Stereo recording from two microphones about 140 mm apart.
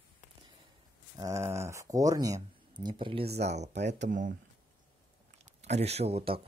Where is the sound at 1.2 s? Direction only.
20° right (ahead or behind); by 4.3 s 70° right (ahead or behind).